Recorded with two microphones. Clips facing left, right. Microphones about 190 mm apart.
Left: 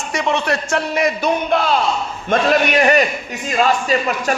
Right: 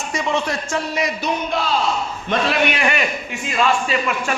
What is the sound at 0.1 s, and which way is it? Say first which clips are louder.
A man's voice: left 3 dB; 70° left (ahead or behind).